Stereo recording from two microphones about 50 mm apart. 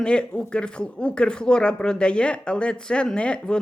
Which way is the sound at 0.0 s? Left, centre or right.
Centre.